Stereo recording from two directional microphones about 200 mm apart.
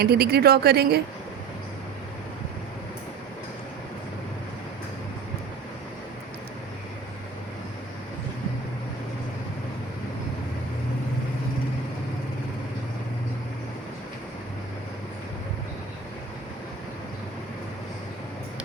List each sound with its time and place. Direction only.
0.0 s speech: 50° right (ahead or behind)